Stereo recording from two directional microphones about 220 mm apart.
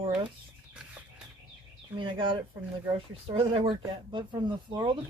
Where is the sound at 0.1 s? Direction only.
5° right (ahead or behind).